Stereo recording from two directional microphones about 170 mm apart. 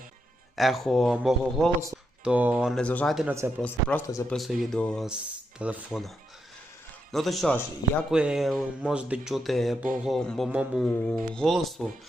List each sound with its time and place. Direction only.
0.5 s speech: centre (ahead or behind)
2.8 s speech: 5° left (ahead or behind)
4.0 s speech: 20° left (ahead or behind)
4.3 s speech: centre (ahead or behind)
7.1 s speech: centre (ahead or behind)